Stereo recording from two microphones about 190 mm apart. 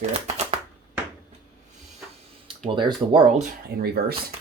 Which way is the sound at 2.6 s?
25° right (ahead or behind).